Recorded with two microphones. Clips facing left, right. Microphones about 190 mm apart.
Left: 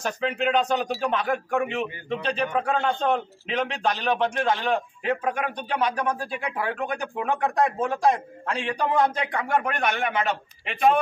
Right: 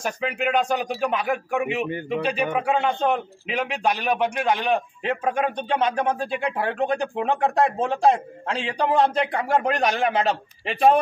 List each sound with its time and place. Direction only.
0.0 s a man's voice: 10° right (ahead or behind); by 11.0 s 35° right (ahead or behind)